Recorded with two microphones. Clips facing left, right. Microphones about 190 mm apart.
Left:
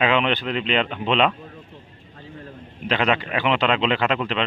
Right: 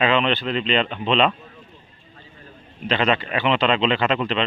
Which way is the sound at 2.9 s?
10° left (ahead or behind).